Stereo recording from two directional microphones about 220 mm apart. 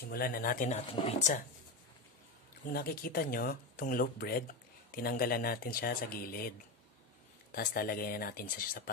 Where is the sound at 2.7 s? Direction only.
40° left (ahead or behind).